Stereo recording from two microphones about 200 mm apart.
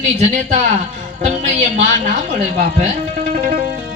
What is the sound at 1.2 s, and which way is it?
A man's voice, 35° right (ahead or behind).